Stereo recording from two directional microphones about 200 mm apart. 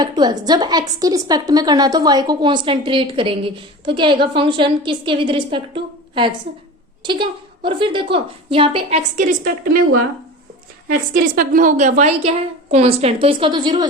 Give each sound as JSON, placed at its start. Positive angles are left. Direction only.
{"t": 0.0, "sound": "a woman's voice", "side_deg": -20}
{"t": 10.8, "sound": "a woman's voice", "side_deg": -45}